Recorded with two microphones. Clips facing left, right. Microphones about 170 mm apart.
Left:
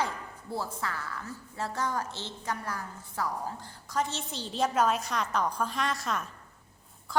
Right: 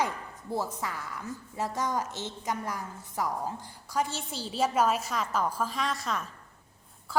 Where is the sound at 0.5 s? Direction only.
15° right (ahead or behind).